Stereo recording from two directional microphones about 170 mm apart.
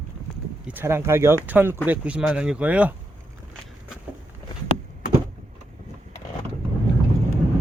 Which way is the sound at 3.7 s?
5° right (ahead or behind).